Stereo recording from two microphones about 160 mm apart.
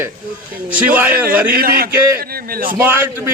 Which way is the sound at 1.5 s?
65° right (ahead or behind).